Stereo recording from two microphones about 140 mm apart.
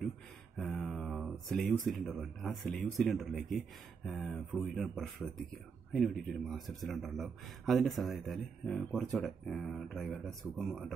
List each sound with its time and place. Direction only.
0.6 s speech: centre (ahead or behind)